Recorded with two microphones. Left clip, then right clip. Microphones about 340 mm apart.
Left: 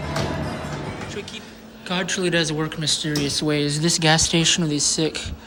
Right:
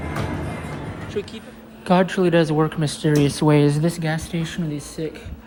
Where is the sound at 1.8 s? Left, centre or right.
Centre.